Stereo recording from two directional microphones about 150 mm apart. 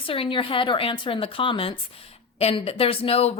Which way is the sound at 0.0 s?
35° left (ahead or behind).